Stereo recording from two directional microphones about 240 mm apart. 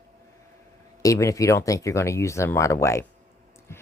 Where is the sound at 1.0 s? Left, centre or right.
Centre.